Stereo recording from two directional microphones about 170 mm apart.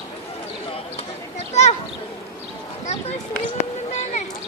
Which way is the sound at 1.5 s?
40° left (ahead or behind).